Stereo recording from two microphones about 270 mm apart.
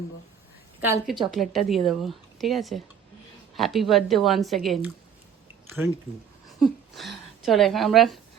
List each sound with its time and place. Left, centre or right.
0.8 s a woman's voice: centre
6.6 s speech: centre